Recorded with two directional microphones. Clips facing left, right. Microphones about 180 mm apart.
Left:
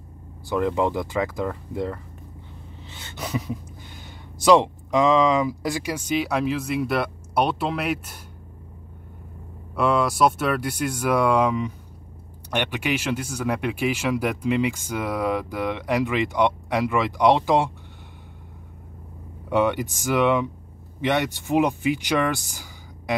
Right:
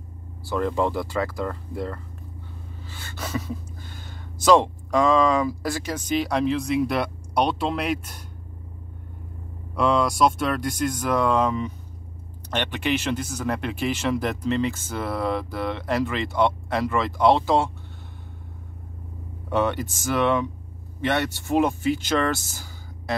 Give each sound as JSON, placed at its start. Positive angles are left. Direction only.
{"t": 0.5, "sound": "speech", "side_deg": 15}
{"t": 9.8, "sound": "speech", "side_deg": 5}
{"t": 19.5, "sound": "speech", "side_deg": 15}